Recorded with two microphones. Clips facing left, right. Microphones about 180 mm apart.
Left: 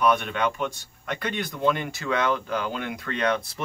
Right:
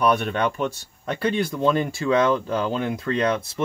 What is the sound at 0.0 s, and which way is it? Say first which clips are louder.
Speech: right 2 dB; 40° right (ahead or behind).